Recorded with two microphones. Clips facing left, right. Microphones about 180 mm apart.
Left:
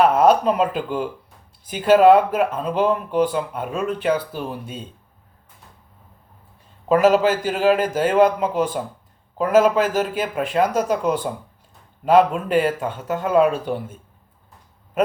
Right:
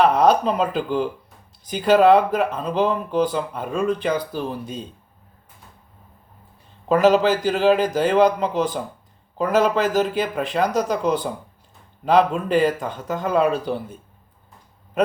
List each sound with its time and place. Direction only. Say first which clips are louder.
0.0 s speech: left 1 dB; 5° left (ahead or behind)
6.8 s speech: even; 5° left (ahead or behind)